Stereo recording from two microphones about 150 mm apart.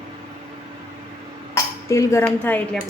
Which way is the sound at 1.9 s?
20° left (ahead or behind).